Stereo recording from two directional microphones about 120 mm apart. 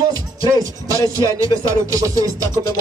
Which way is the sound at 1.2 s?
25° right (ahead or behind).